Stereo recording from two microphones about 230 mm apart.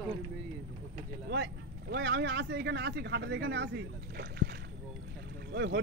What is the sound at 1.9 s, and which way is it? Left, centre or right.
Speech, right.